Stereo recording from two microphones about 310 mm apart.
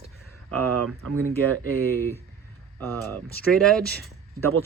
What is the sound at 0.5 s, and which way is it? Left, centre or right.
Cattle, right.